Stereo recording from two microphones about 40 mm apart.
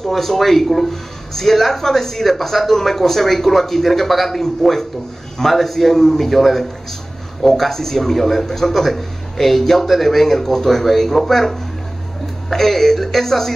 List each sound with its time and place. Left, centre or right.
0.0 s a man's voice: centre